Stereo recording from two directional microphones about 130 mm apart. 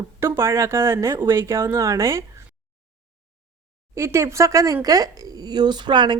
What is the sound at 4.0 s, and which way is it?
A woman's voice, 20° right (ahead or behind).